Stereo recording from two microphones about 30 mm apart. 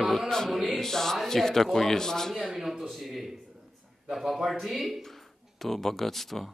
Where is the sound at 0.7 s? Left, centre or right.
Centre.